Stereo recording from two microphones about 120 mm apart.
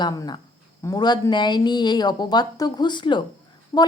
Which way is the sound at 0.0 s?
35° left (ahead or behind).